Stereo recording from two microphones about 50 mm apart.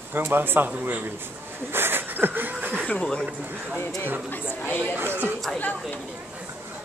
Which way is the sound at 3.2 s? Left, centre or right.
Right.